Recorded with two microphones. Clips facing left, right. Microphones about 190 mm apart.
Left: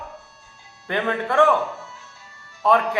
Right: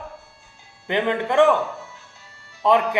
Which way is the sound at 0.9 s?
15° right (ahead or behind).